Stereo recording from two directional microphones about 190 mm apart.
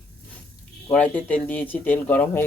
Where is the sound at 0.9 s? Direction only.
5° left (ahead or behind).